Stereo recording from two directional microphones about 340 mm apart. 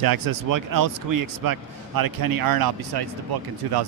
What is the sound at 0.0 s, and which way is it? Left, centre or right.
Speech, right.